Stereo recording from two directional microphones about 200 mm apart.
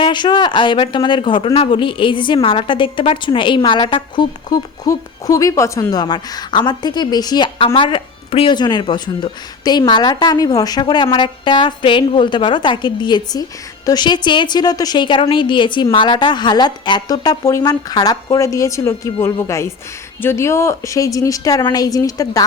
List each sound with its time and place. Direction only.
0.0 s a woman's voice: 25° left (ahead or behind)